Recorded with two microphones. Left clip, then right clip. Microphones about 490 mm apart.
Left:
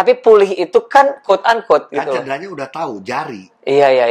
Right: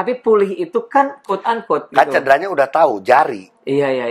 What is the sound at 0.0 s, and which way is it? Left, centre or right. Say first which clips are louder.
Speech: left 6 dB; left.